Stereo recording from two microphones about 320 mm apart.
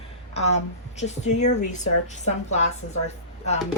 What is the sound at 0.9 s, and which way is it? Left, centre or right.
A woman's voice, left.